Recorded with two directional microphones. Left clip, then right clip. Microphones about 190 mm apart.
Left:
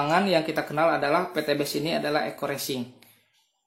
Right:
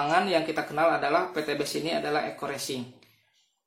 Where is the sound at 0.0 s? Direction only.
40° left (ahead or behind).